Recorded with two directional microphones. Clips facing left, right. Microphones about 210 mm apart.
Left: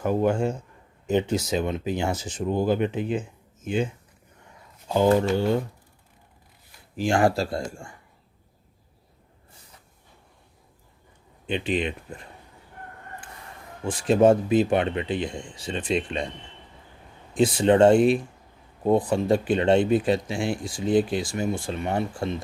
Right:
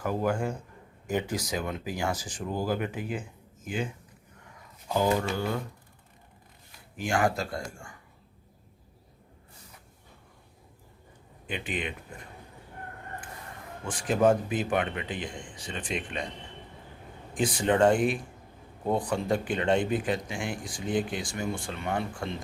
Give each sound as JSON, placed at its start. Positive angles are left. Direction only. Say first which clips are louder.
{"t": 0.0, "sound": "speech", "louder": "left 6 dB", "side_deg": 25}
{"t": 5.3, "sound": "speech", "louder": "left 8 dB", "side_deg": 25}
{"t": 6.9, "sound": "speech", "louder": "left 6 dB", "side_deg": 30}
{"t": 11.4, "sound": "speech", "louder": "left 8 dB", "side_deg": 25}
{"t": 13.8, "sound": "speech", "louder": "left 6 dB", "side_deg": 25}
{"t": 17.3, "sound": "speech", "louder": "left 7 dB", "side_deg": 25}